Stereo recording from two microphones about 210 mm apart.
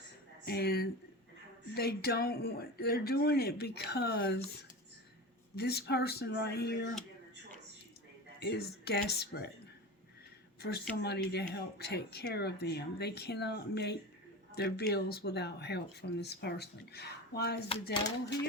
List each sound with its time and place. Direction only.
0.4 s speech: 50° left (ahead or behind)
5.5 s speech: 50° left (ahead or behind)
8.4 s speech: 50° left (ahead or behind)
10.6 s speech: 50° left (ahead or behind)